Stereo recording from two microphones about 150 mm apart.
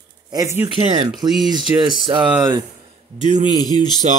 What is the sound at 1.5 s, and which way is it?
Speech, 30° right (ahead or behind).